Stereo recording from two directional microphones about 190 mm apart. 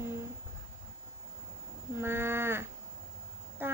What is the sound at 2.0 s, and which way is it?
Livestock, 10° right (ahead or behind).